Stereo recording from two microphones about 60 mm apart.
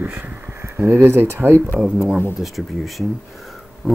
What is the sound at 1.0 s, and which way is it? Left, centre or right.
Speech, right.